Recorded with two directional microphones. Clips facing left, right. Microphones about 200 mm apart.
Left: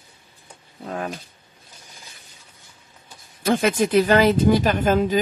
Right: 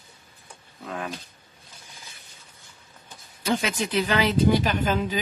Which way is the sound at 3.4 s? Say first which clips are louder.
Left 6 dB; 50° left (ahead or behind).